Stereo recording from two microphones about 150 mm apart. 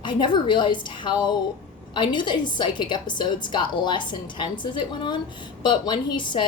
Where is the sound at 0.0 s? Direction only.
30° left (ahead or behind).